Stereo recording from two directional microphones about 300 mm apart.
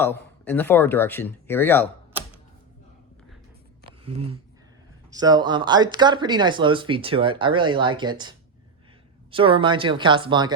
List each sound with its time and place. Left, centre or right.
0.0 s speech: centre
4.0 s speech: centre